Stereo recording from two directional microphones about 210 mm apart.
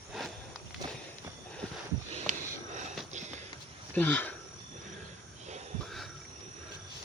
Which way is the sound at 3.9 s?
10° left (ahead or behind).